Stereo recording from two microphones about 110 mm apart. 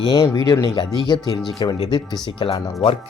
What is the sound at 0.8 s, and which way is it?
Speech, 50° left (ahead or behind).